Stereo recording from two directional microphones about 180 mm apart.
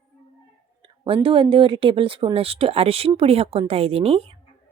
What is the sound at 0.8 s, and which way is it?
Speech, 30° right (ahead or behind).